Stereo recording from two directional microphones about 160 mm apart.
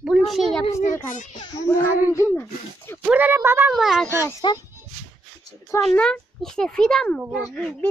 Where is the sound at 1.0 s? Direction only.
50° left (ahead or behind).